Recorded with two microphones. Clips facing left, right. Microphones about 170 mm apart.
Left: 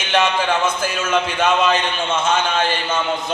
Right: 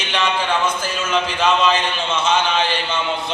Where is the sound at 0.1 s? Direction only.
50° left (ahead or behind).